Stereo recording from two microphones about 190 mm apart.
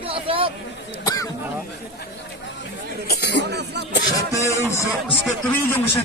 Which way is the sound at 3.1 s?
60° left (ahead or behind).